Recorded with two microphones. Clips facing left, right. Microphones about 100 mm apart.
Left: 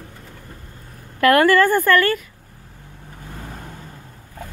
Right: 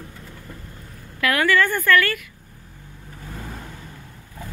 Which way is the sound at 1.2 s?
45° left (ahead or behind).